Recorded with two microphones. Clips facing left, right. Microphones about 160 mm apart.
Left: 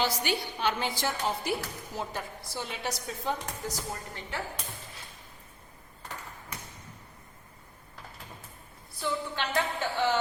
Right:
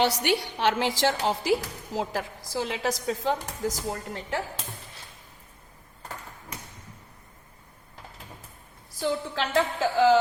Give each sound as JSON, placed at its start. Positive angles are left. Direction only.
{"t": 0.0, "sound": "a woman's voice", "side_deg": -70}
{"t": 9.0, "sound": "a woman's voice", "side_deg": -90}